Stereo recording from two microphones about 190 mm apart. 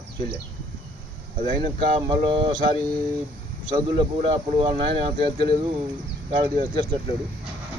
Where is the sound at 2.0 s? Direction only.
25° right (ahead or behind).